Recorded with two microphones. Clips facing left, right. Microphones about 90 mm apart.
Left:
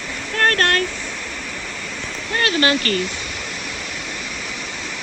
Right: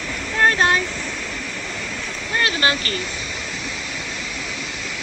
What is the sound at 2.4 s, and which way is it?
Speech, 25° right (ahead or behind).